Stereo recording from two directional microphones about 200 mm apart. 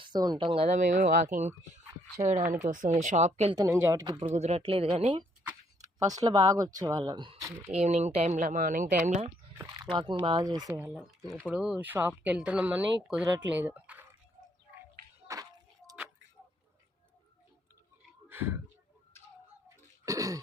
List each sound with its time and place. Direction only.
0.0 s speech: 20° right (ahead or behind)
3.5 s speech: 15° right (ahead or behind)
4.3 s speech: 35° right (ahead or behind)
7.8 s speech: 35° right (ahead or behind)
9.6 s speech: 20° right (ahead or behind)
10.7 s speech: 10° right (ahead or behind)
18.3 s a sound: 10° right (ahead or behind)
19.6 s throat clearing: 15° right (ahead or behind)